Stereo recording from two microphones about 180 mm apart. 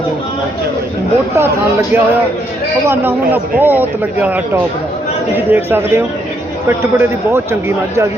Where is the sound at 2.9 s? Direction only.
10° right (ahead or behind).